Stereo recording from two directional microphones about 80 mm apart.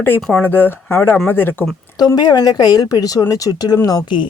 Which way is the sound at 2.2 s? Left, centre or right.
Left.